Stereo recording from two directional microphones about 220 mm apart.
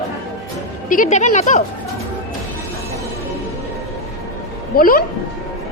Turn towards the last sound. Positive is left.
turn(degrees=40)  # may be behind; listen again after turning